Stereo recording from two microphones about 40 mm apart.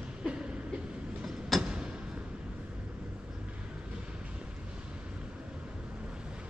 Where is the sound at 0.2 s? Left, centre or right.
Right.